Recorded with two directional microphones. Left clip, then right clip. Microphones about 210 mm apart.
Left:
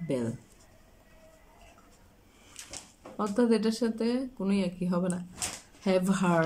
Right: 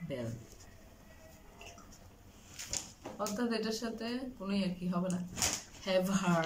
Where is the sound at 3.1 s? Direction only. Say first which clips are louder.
Left 9 dB; 45° left (ahead or behind).